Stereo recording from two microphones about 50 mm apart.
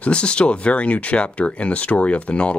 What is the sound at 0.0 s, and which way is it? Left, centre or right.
Speech, left.